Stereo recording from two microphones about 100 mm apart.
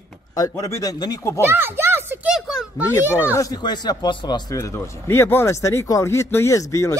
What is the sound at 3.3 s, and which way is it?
Speech, 40° left (ahead or behind).